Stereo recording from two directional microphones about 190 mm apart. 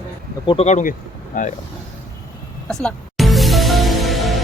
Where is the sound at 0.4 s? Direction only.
35° left (ahead or behind).